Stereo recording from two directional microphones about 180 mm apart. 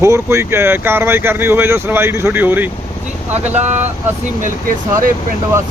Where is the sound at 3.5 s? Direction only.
40° right (ahead or behind).